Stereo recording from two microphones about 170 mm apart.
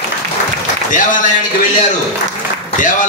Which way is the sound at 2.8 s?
50° left (ahead or behind).